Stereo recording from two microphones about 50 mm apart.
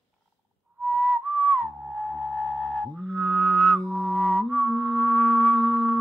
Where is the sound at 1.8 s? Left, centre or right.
Centre.